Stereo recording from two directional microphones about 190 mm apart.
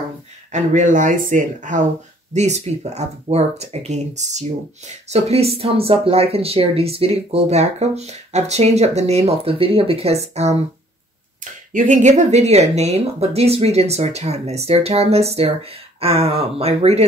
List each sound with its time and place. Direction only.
0.5 s speech: 40° right (ahead or behind)
11.7 s speech: 40° right (ahead or behind)